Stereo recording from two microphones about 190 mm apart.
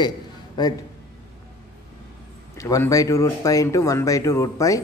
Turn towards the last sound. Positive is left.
turn(degrees=15)  # may be behind; listen again after turning